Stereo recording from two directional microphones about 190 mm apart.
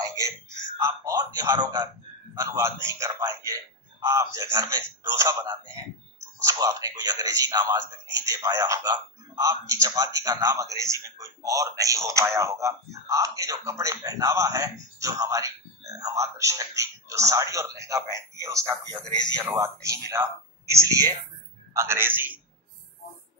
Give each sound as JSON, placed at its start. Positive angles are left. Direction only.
{"t": 0.7, "sound": "a man's voice", "side_deg": -15}